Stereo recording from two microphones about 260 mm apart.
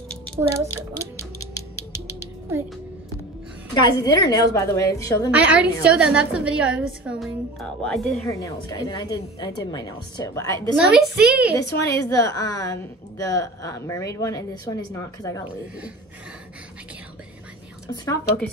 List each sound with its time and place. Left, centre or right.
0.7 s music: left
3.8 s a woman's voice: centre
5.3 s a woman's voice: centre
8.3 s a woman's voice: centre
10.9 s a woman's voice: centre
11.5 s a woman's voice: centre
18.0 s a woman's voice: centre